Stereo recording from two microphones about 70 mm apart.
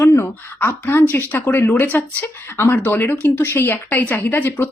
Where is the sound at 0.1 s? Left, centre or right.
Left.